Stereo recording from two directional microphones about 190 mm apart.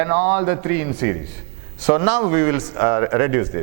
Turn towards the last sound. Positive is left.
turn(degrees=-15)  # may be behind; listen again after turning